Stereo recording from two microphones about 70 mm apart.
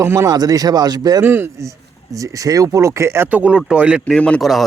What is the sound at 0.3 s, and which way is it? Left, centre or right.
Speech, right.